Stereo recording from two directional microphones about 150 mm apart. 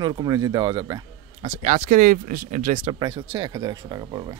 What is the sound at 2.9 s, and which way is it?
Speech, 30° right (ahead or behind).